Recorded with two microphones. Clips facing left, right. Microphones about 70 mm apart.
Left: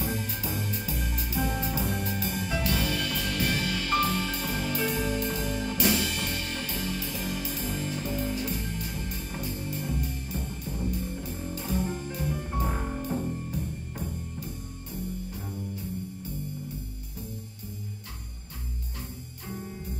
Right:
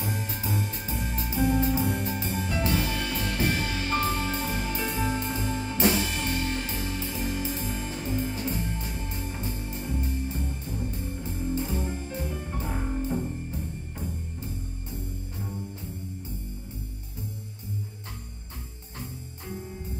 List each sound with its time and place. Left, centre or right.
0.1 s music: right